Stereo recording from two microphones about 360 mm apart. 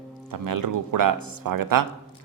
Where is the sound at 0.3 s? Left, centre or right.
Right.